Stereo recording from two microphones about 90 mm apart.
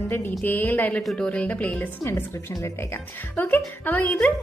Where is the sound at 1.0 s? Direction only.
5° left (ahead or behind).